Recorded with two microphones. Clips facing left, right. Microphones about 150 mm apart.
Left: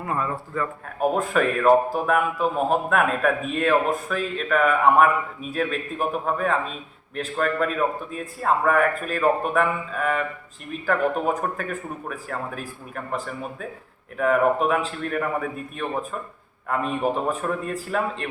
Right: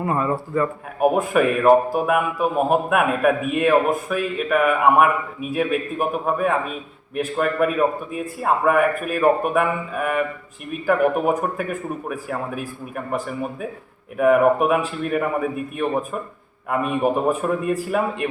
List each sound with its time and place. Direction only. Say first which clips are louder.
0.0 s speech: right 5 dB; 25° right (ahead or behind)
0.9 s speech: right 4 dB; 10° right (ahead or behind)